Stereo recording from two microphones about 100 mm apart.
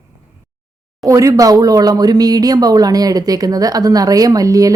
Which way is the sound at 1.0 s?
35° right (ahead or behind).